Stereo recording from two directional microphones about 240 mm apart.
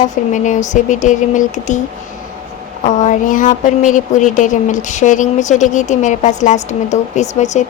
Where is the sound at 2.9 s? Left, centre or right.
Left.